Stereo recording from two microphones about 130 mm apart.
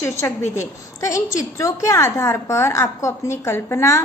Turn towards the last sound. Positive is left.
turn(degrees=20)  # may be behind; listen again after turning